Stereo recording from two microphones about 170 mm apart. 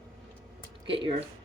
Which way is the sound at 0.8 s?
30° right (ahead or behind).